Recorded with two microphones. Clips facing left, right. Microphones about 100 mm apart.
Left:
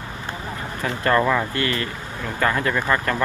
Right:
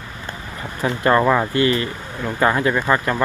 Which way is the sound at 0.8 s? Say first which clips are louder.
Right 3 dB; 20° right (ahead or behind).